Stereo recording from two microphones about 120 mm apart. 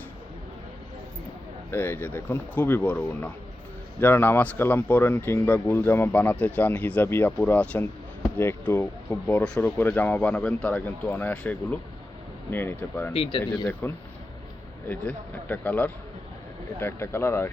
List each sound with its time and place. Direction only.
1.7 s speech: 20° left (ahead or behind)
9.0 s speech: 10° left (ahead or behind)